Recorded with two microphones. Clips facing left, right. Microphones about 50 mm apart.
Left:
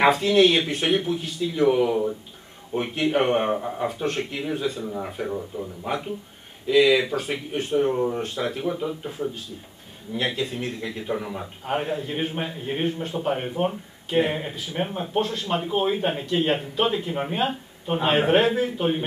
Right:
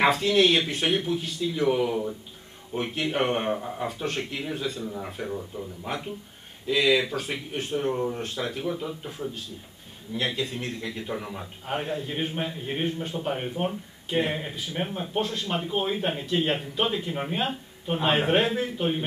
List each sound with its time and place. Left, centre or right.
0.0 s a man's voice: centre